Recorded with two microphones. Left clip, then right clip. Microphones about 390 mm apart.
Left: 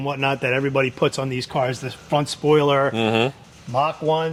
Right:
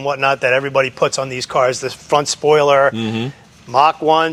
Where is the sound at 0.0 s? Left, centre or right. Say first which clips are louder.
Right 7 dB; right.